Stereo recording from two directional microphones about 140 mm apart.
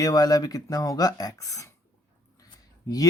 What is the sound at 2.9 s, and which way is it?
Speech, 25° left (ahead or behind).